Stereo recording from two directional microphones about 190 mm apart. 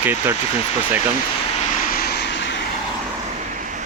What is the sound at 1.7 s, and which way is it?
Vehicle, 50° left (ahead or behind).